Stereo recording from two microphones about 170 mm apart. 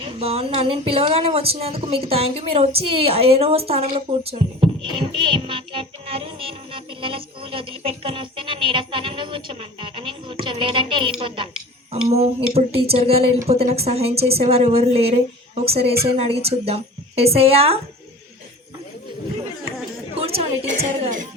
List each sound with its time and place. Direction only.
0.0 s music: 35° right (ahead or behind)
20.1 s a sound: 35° right (ahead or behind)
20.8 s speech: 50° right (ahead or behind)